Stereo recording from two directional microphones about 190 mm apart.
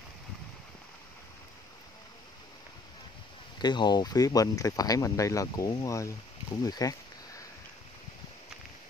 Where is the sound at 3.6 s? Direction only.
20° left (ahead or behind).